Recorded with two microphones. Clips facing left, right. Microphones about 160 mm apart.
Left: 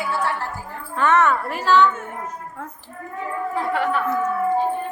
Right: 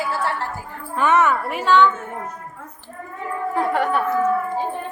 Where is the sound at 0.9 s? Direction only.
10° right (ahead or behind).